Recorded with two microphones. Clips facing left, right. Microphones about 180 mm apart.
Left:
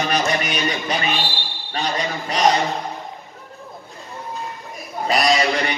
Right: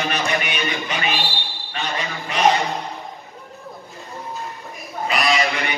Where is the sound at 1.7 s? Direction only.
35° left (ahead or behind).